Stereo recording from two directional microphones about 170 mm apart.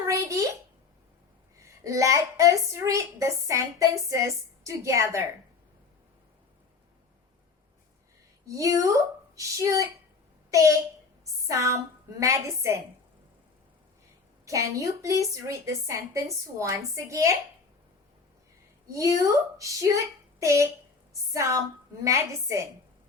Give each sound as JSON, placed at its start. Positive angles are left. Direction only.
{"t": 0.1, "sound": "a sound", "side_deg": -20}
{"t": 1.6, "sound": "a woman's voice", "side_deg": -20}
{"t": 8.4, "sound": "a woman's voice", "side_deg": -20}
{"t": 14.4, "sound": "a woman's voice", "side_deg": -20}
{"t": 18.9, "sound": "a woman's voice", "side_deg": -20}